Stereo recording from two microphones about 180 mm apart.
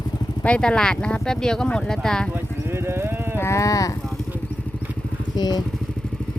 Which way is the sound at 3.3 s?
15° left (ahead or behind).